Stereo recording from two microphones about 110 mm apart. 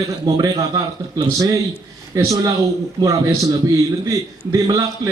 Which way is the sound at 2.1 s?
30° right (ahead or behind).